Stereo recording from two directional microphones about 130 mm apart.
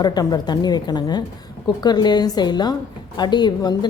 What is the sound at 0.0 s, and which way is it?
A woman's voice, 30° left (ahead or behind).